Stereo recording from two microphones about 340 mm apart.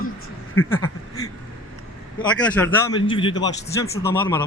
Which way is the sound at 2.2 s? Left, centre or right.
Centre.